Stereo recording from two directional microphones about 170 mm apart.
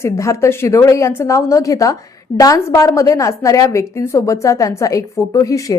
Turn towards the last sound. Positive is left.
turn(degrees=20)  # may be behind; listen again after turning